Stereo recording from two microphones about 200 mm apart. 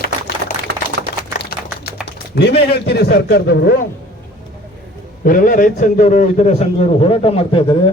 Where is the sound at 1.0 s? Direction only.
55° right (ahead or behind).